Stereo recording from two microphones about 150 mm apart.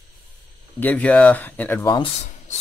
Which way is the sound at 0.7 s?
10° left (ahead or behind).